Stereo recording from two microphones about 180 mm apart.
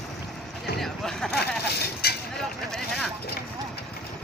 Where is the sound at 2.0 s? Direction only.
60° left (ahead or behind).